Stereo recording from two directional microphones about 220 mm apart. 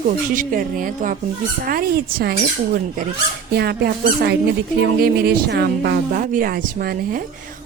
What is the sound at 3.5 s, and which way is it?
Speech, 45° right (ahead or behind).